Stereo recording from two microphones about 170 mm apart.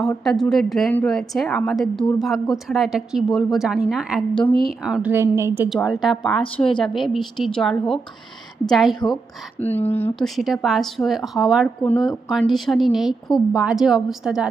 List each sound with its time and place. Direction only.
0.0 s a woman's voice: 5° left (ahead or behind)
5.1 s a woman's voice: 15° right (ahead or behind)
5.9 s a woman's voice: centre (ahead or behind)
9.6 s speech: 10° left (ahead or behind)
10.2 s a woman's voice: centre (ahead or behind)